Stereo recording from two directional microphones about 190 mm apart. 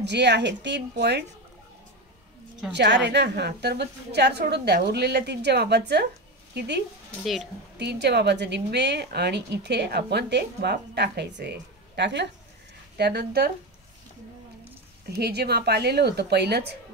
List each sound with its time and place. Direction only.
0.0 s a woman's voice: 65° right (ahead or behind)
2.7 s a woman's voice: 65° right (ahead or behind)
7.8 s a woman's voice: 60° right (ahead or behind)
15.0 s a woman's voice: 55° right (ahead or behind)